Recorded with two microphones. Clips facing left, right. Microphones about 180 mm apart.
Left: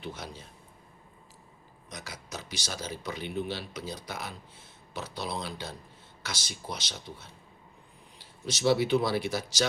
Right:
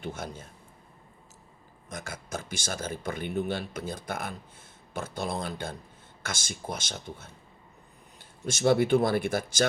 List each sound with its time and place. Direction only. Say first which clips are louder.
0.0 s speech: right 3 dB; 50° right (ahead or behind)
1.9 s speech: right 5 dB; 50° right (ahead or behind)